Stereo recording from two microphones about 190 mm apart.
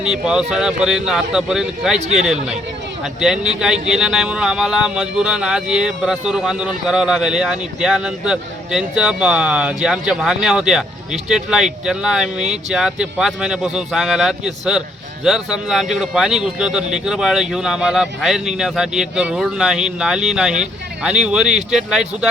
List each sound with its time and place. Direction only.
0.0 s speech: 5° right (ahead or behind)
2.0 s speech: 35° right (ahead or behind)
2.2 s speech: 5° right (ahead or behind)